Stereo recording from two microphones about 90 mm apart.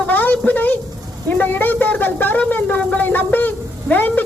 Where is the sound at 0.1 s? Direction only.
20° left (ahead or behind).